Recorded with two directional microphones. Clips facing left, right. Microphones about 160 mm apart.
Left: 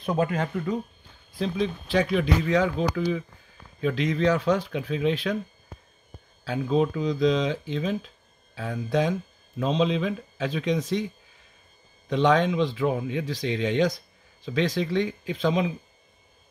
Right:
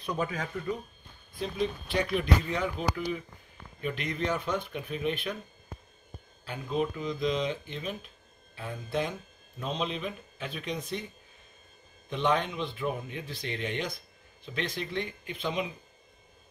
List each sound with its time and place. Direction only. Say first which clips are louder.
0.0 s speech: left 7 dB; 55° left (ahead or behind)
1.4 s speech: left 4 dB; 90° left
3.9 s speech: left 8 dB; 90° left
6.4 s speech: left 7 dB; 90° left
12.1 s speech: left 7 dB; 90° left